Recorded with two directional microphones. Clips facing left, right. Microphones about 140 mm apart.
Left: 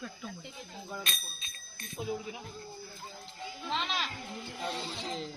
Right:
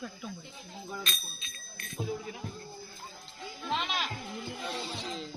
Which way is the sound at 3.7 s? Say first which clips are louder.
Right 2 dB; 5° right (ahead or behind).